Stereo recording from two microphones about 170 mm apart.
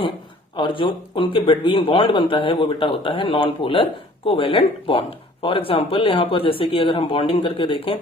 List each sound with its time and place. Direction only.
0.5 s speech: 30° left (ahead or behind)